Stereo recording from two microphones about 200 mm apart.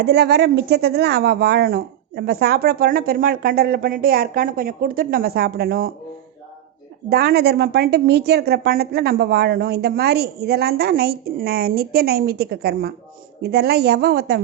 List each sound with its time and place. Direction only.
0.0 s speech: 55° right (ahead or behind)
7.1 s speech: 50° right (ahead or behind)